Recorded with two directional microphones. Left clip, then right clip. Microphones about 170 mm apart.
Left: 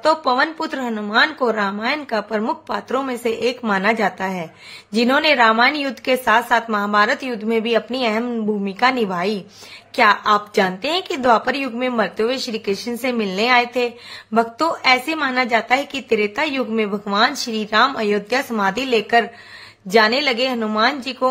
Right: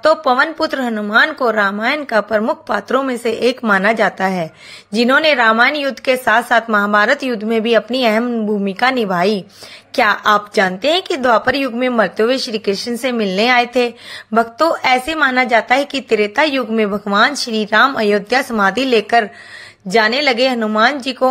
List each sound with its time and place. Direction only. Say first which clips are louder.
0.0 s a woman's voice: right 4 dB; 25° right (ahead or behind)